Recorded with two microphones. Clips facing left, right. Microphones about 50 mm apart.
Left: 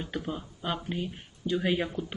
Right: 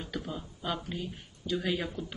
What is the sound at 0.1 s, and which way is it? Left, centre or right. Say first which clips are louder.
A woman's voice: left 3 dB; left.